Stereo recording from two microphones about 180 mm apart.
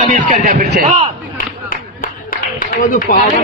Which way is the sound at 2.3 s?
50° left (ahead or behind).